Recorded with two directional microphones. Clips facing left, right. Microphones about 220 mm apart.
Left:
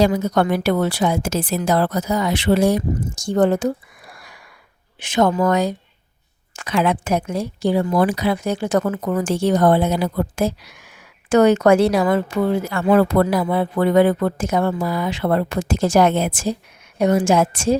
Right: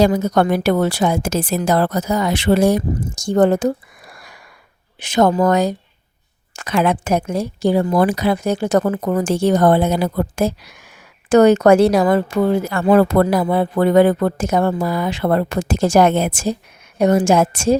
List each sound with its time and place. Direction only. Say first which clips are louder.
0.0 s speech: right 2 dB; 40° right (ahead or behind)
4.1 s a sound: right 1 dB; 45° right (ahead or behind)
4.9 s speech: right 3 dB; 40° right (ahead or behind)